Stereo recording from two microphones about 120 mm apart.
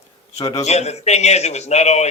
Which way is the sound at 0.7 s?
65° left (ahead or behind).